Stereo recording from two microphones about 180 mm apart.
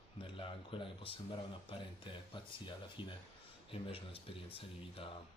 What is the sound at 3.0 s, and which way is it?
Speech, 25° left (ahead or behind).